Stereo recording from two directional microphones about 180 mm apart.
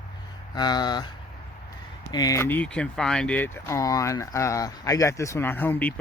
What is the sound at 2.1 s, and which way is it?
Speech, 20° left (ahead or behind).